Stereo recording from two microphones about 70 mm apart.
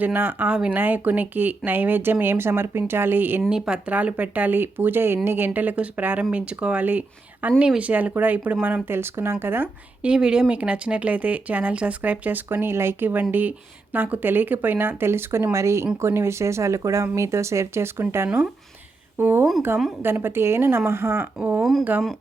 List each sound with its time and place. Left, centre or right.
0.0 s speech: right
0.5 s speech: centre
0.8 s a woman's voice: right
3.5 s a woman's voice: centre; by 9.6 s right
10.0 s a woman's voice: centre; by 21.2 s right
21.6 s speech: centre